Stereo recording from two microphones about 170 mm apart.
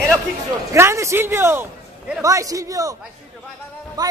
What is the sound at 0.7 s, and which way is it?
A man's voice, 15° right (ahead or behind).